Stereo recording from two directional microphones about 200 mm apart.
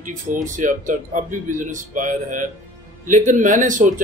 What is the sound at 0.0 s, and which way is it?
A man's voice, 40° right (ahead or behind).